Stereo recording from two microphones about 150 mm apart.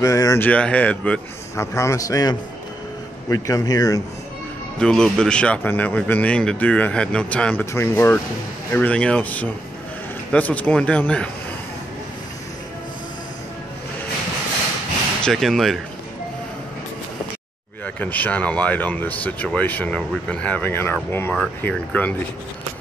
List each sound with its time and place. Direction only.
0.0 s speech: 20° left (ahead or behind)
0.5 s speech: 10° left (ahead or behind)
1.6 s a man's voice: 20° left (ahead or behind)
4.7 s speech: 5° left (ahead or behind)
15.2 s speech: centre (ahead or behind)
17.8 s speech: 10° left (ahead or behind)